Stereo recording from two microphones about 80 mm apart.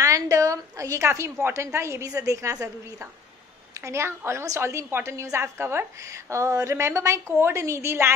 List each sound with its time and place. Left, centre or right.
0.0 s a woman's voice: right